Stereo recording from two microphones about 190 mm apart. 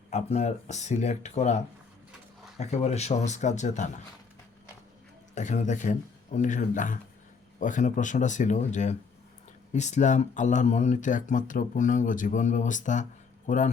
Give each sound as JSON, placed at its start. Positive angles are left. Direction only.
{"t": 0.1, "sound": "speech", "side_deg": 35}
{"t": 5.3, "sound": "speech", "side_deg": 40}